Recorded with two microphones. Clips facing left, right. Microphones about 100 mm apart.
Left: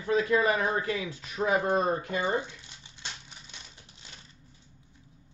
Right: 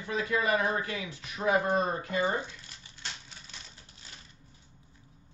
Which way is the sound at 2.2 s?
20° left (ahead or behind).